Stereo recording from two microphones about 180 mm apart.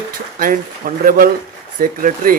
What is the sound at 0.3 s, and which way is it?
Speech, 50° right (ahead or behind).